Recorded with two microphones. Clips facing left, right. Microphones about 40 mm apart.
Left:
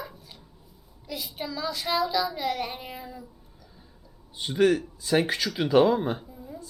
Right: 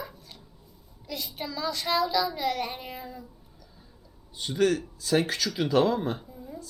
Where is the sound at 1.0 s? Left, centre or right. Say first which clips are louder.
Left 1 dB; centre.